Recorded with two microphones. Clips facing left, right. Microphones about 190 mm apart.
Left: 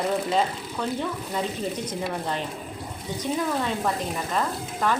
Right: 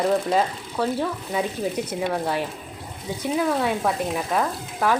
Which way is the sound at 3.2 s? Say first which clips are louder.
Right 4 dB; 10° right (ahead or behind).